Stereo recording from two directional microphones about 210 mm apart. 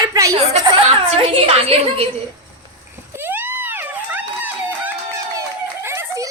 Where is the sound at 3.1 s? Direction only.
10° right (ahead or behind).